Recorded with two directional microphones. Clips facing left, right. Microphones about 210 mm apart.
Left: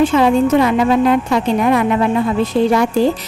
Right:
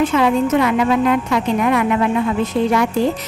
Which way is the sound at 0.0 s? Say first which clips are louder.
Left 3 dB; 30° left (ahead or behind).